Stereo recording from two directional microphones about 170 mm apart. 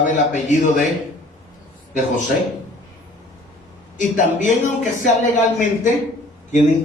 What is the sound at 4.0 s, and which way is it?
A man's voice, 45° left (ahead or behind).